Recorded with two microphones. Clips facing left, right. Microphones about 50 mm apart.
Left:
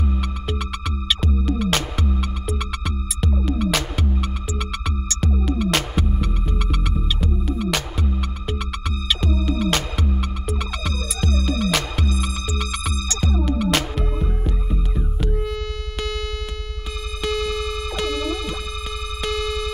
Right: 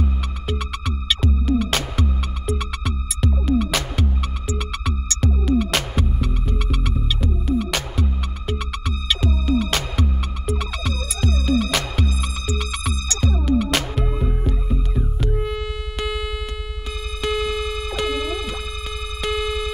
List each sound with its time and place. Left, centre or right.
0.5 s music: centre
15.3 s chirp tone: centre
17.2 s music: centre